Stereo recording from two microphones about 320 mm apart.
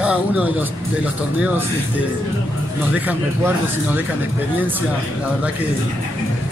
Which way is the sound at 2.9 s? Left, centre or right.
Centre.